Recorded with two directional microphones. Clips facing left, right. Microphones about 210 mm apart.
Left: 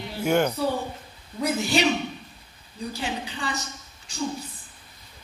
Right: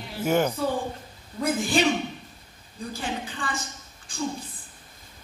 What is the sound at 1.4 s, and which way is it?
Speech, 50° right (ahead or behind).